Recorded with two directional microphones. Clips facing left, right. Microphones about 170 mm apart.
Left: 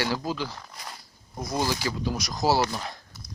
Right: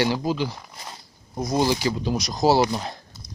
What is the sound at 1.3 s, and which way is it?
Speech, 20° right (ahead or behind).